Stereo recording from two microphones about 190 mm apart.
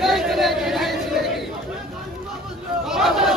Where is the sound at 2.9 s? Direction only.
Centre (ahead or behind).